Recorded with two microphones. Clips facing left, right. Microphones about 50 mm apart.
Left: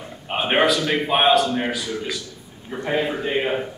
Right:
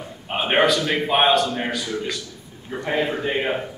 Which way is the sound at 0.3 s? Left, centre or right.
Centre.